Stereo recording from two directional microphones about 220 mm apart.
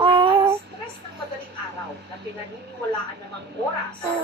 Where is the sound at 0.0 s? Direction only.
20° right (ahead or behind).